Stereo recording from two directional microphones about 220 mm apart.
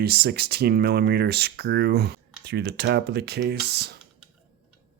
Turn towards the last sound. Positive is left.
turn(degrees=-50)  # may be behind; listen again after turning